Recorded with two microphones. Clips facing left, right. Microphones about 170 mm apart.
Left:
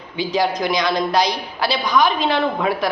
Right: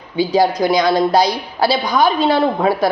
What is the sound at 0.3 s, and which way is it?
A woman's voice, 30° right (ahead or behind).